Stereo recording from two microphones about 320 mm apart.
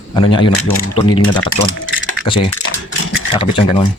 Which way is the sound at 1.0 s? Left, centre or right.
Left.